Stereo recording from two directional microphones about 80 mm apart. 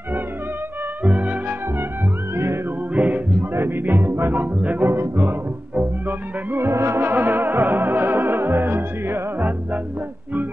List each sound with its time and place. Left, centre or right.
1.0 s music: centre
2.3 s music: right
2.9 s music: centre